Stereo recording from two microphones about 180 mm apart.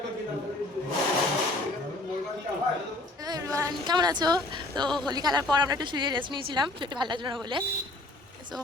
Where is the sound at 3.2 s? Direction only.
20° right (ahead or behind).